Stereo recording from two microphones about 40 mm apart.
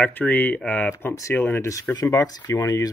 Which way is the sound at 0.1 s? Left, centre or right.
Left.